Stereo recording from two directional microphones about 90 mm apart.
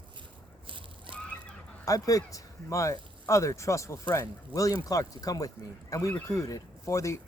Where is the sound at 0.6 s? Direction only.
70° right (ahead or behind).